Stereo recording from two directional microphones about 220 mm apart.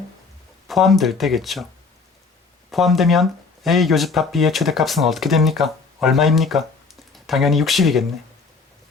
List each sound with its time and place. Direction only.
0.7 s speech: centre (ahead or behind)
2.6 s speech: centre (ahead or behind)